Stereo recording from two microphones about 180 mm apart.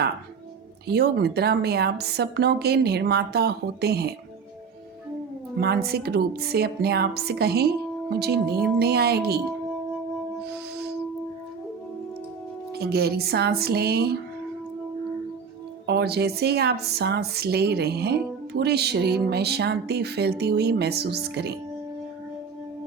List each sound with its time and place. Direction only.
0.9 s a woman's voice: 65° right (ahead or behind)
5.5 s a woman's voice: 60° right (ahead or behind)
12.7 s a woman's voice: 60° right (ahead or behind)
15.9 s a woman's voice: 65° right (ahead or behind)